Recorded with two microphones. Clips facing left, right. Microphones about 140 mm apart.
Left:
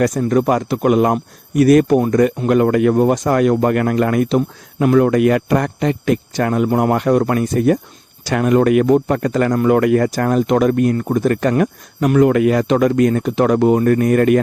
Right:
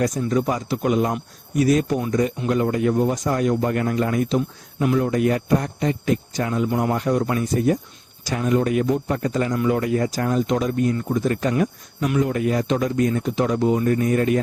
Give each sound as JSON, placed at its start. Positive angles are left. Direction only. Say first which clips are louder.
{"t": 0.0, "sound": "speech", "louder": "left 6 dB", "side_deg": 65}